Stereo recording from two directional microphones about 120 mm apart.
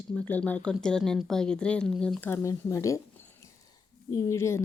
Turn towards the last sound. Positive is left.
turn(degrees=25)  # may be behind; listen again after turning